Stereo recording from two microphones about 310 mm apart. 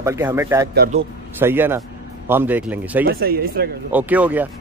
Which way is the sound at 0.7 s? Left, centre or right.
Right.